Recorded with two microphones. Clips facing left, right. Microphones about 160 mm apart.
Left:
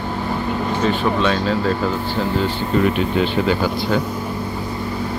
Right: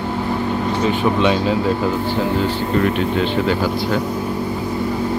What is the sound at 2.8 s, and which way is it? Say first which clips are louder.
Speech: left 2 dB; 5° left (ahead or behind).